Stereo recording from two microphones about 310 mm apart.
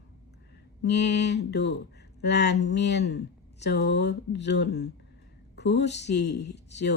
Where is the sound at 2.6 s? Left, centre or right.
Left.